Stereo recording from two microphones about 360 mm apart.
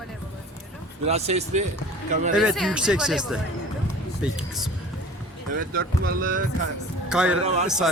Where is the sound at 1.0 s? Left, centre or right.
Centre.